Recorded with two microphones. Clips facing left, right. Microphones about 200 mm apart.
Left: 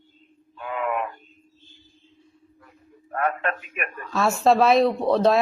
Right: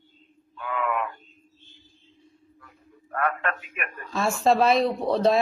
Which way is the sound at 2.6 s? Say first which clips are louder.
Left 3 dB; 25° left (ahead or behind).